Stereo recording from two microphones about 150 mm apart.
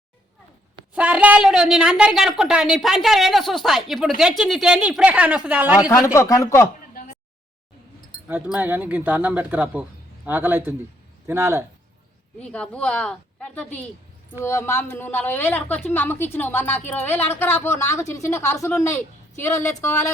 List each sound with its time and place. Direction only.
0.9 s speech: 10° right (ahead or behind)
6.1 s speech: 25° left (ahead or behind)
8.5 s speech: 10° right (ahead or behind)
12.4 s a woman's voice: 10° left (ahead or behind)